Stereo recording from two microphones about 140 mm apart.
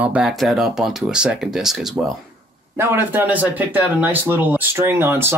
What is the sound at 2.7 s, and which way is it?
Speech, 15° right (ahead or behind).